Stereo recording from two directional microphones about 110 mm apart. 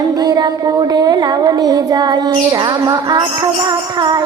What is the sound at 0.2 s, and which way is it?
Child singing, 35° right (ahead or behind).